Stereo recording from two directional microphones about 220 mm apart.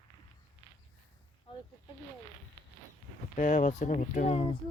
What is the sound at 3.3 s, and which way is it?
Speech, 35° left (ahead or behind).